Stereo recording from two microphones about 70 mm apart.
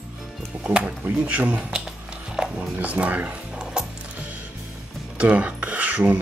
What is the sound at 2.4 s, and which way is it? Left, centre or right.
Horse, centre.